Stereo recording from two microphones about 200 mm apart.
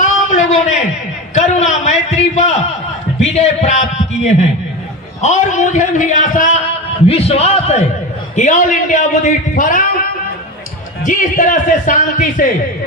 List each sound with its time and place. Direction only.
0.0 s a sound: 35° left (ahead or behind)
3.2 s a man's voice: 35° left (ahead or behind)
11.0 s a man's voice: 40° left (ahead or behind)